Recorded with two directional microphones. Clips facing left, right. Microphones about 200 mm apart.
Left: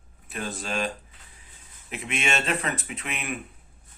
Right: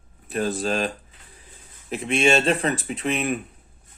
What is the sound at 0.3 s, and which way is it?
Speech, 40° right (ahead or behind).